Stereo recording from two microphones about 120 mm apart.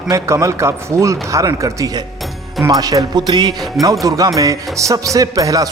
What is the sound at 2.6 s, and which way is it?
Music, 30° right (ahead or behind).